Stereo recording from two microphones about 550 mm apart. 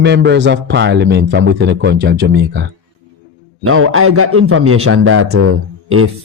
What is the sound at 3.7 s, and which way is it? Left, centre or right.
Speech, right.